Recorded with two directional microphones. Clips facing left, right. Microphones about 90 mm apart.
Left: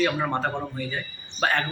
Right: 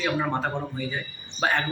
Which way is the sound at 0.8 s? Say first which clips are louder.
Even; 10° right (ahead or behind).